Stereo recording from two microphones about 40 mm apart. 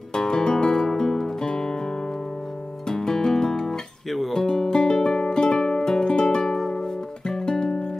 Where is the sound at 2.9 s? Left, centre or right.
Centre.